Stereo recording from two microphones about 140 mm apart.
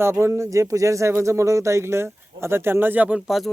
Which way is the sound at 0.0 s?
20° right (ahead or behind).